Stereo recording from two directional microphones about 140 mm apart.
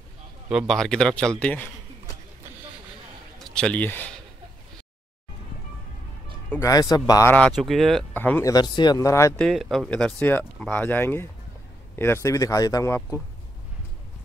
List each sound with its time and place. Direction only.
0.5 s a man's voice: centre (ahead or behind)
3.3 s speech: 5° left (ahead or behind)
6.6 s speech: 25° left (ahead or behind)
7.3 s a man's voice: 5° left (ahead or behind)
8.1 s speech: 10° left (ahead or behind)
8.5 s speech: 30° left (ahead or behind)
9.4 s speech: centre (ahead or behind); by 13.2 s 20° left (ahead or behind)